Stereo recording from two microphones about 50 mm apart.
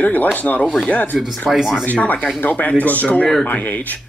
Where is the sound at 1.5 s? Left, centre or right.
Centre.